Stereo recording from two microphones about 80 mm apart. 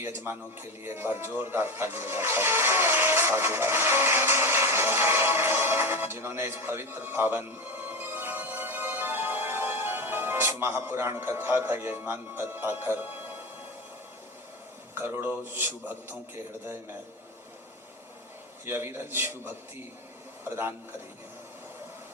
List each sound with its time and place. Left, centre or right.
0.0 s speech: right
14.9 s a man's voice: right
18.6 s a man's voice: right